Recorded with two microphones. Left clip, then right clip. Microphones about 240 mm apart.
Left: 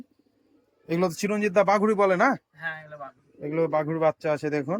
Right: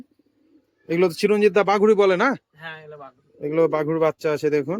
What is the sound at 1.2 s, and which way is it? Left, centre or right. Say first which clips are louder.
Speech: right 4 dB; centre.